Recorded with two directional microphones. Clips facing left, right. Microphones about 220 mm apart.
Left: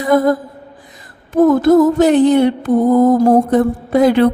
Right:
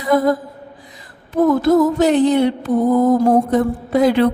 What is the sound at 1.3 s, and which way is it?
Mantra, 50° left (ahead or behind).